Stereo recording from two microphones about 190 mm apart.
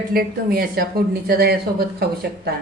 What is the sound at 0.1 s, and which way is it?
Speech, 50° right (ahead or behind).